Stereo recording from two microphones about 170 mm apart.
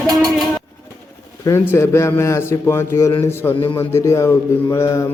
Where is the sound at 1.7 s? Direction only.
15° left (ahead or behind).